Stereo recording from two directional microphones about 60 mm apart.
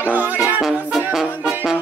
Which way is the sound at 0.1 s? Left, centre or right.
Right.